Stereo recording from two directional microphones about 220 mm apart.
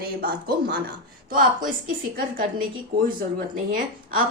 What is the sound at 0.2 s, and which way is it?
A woman's voice, 40° right (ahead or behind).